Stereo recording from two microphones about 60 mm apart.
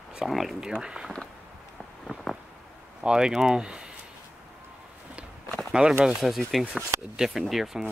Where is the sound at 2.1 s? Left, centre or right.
Centre.